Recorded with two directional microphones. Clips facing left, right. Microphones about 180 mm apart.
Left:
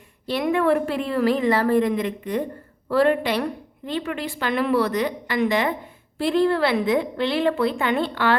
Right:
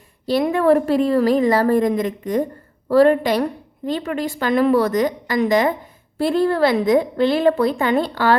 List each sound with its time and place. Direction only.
0.3 s a woman's voice: 35° right (ahead or behind)